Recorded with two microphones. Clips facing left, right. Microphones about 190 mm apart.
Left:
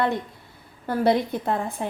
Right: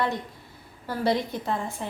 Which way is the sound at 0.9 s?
55° left (ahead or behind).